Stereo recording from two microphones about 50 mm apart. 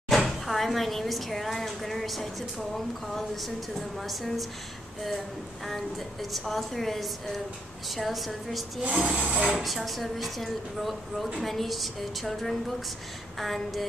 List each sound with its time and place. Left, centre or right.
0.1 s speech: centre
4.0 s a woman's voice: centre
5.7 s a woman's voice: centre
9.0 s speech: right
9.6 s a woman's voice: centre